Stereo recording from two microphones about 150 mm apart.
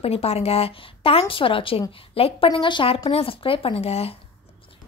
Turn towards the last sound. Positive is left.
turn(degrees=40)  # may be behind; listen again after turning